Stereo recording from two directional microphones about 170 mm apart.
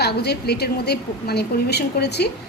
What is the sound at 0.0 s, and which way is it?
A woman's voice, 70° left (ahead or behind).